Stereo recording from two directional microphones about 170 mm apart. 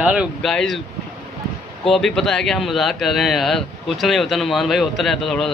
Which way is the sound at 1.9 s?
Centre (ahead or behind).